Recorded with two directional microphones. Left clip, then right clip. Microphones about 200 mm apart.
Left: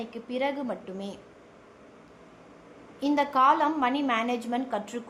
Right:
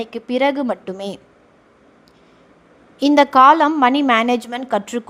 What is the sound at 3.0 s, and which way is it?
A woman's voice, 45° right (ahead or behind).